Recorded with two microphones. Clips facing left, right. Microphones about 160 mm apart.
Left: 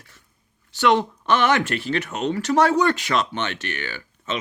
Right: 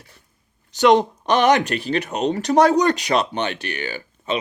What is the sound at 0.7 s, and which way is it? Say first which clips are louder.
Speech: right 4 dB; 20° right (ahead or behind).